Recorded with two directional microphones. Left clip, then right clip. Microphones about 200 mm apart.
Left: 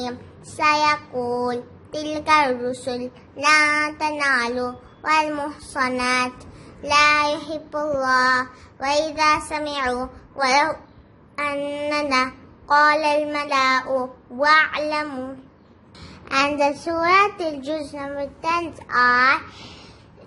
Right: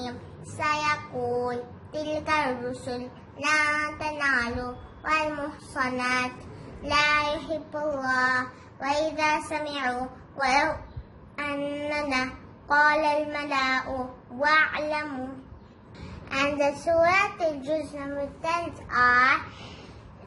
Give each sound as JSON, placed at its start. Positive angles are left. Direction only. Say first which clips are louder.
{"t": 0.6, "sound": "child singing", "louder": "left 8 dB", "side_deg": 55}
{"t": 16.3, "sound": "a child's voice", "louder": "left 6 dB", "side_deg": 55}